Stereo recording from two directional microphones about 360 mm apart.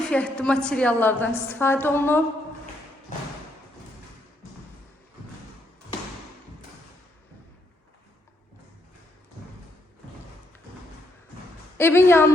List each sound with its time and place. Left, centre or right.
0.0 s a woman's voice: centre
11.8 s a woman's voice: centre